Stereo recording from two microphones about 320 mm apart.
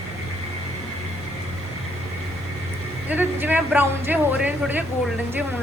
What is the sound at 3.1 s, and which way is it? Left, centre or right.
Speech, centre.